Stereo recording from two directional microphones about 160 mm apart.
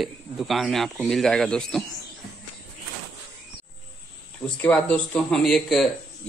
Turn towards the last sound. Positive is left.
turn(degrees=0)  # may be behind; listen again after turning